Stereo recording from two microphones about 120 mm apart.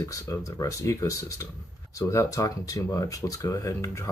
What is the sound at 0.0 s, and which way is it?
Speech, 30° left (ahead or behind).